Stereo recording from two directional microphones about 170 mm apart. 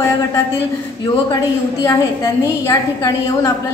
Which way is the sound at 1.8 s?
20° left (ahead or behind).